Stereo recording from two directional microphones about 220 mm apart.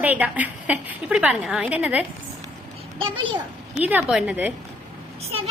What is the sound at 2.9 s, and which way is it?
Speech, 25° right (ahead or behind).